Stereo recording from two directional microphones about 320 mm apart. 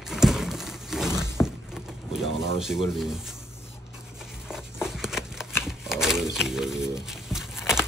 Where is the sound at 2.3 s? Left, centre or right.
Centre.